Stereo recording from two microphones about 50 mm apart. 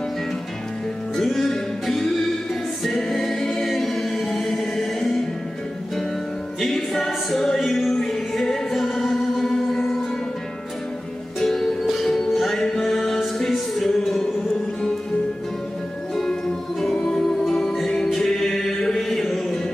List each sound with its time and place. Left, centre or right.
1.1 s music: centre
2.8 s a capella: centre
6.6 s music: centre
11.3 s music: centre
16.8 s music: centre